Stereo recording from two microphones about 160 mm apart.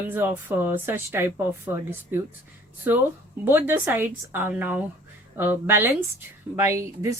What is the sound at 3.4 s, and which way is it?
Speech, 15° right (ahead or behind).